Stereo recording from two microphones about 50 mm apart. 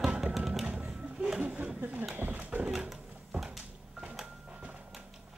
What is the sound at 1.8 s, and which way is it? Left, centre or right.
Speech, right.